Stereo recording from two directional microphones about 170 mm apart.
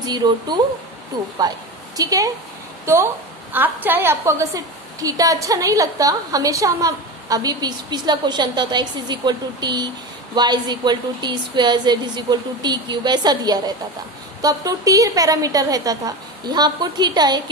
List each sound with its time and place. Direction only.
0.0 s a woman's voice: 25° right (ahead or behind)
3.5 s a woman's voice: 10° right (ahead or behind)